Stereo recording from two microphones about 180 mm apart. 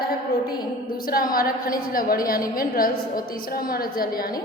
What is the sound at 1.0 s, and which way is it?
A woman's voice, 55° left (ahead or behind).